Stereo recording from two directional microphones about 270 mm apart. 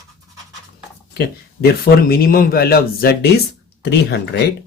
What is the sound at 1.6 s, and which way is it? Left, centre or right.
Speech, left.